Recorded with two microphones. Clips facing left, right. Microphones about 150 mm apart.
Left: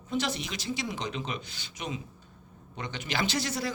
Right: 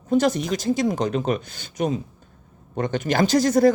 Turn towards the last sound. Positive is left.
turn(degrees=-45)  # may be behind; listen again after turning